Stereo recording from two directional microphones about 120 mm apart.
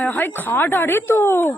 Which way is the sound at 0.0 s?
15° left (ahead or behind).